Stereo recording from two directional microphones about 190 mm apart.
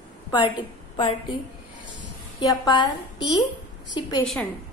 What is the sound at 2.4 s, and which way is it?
A woman's voice, 20° left (ahead or behind).